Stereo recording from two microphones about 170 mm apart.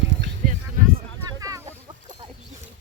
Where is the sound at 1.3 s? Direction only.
20° right (ahead or behind).